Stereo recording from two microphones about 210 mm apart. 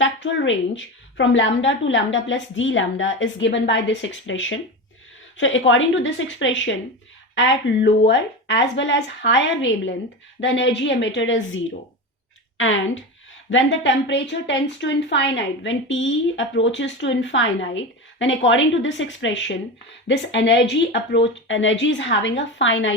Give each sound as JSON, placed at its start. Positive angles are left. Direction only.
{"t": 0.0, "sound": "a woman's voice", "side_deg": 65}